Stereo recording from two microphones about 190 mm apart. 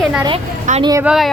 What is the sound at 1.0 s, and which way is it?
Speech, centre (ahead or behind).